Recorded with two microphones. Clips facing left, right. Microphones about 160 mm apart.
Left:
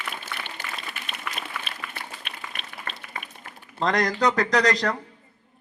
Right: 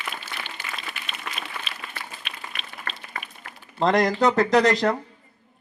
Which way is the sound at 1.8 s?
25° right (ahead or behind).